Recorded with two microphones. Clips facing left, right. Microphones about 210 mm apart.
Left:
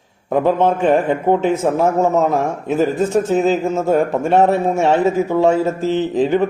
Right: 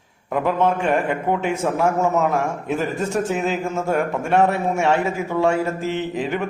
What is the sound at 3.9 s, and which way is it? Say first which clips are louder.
A man's voice: left 4 dB; 35° left (ahead or behind).